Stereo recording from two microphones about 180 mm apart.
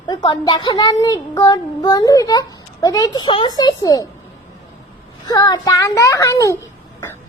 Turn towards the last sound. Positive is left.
turn(degrees=15)  # may be behind; listen again after turning